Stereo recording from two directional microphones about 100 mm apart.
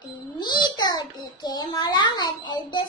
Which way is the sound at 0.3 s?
45° left (ahead or behind).